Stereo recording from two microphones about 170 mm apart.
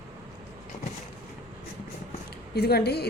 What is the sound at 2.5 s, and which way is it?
Speech, 70° left (ahead or behind).